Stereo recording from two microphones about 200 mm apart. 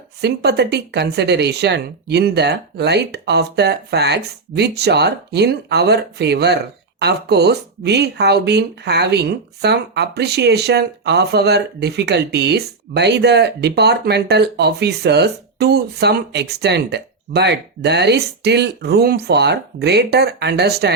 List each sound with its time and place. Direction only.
0.2 s speech: 55° right (ahead or behind)